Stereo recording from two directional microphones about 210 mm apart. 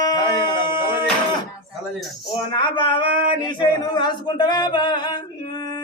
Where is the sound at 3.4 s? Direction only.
20° left (ahead or behind).